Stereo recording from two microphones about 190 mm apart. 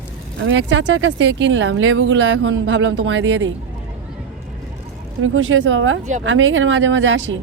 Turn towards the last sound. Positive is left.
turn(degrees=-80)